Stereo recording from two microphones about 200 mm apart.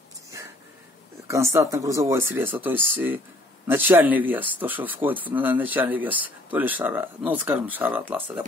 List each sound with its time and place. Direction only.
1.2 s speech: 15° right (ahead or behind)